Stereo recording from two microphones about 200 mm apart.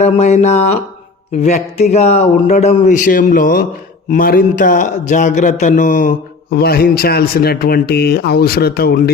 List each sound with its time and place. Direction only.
0.0 s speech: 35° left (ahead or behind); by 9.1 s 50° left (ahead or behind)